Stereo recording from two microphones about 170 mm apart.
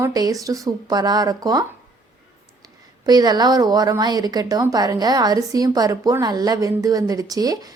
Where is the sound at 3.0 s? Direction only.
25° right (ahead or behind).